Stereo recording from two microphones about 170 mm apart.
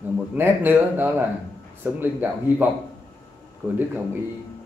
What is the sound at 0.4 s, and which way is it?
Speech, 10° right (ahead or behind).